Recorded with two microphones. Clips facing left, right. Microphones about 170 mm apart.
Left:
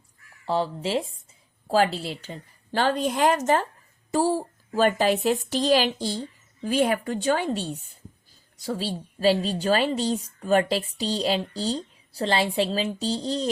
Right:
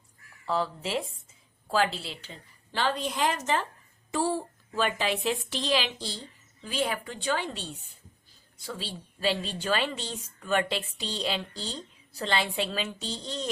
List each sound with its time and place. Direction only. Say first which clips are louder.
0.4 s a woman's voice: left 4 dB; 30° left (ahead or behind)